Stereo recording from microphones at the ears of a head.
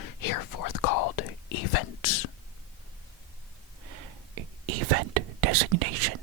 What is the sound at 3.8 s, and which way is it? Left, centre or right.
Whispering, right.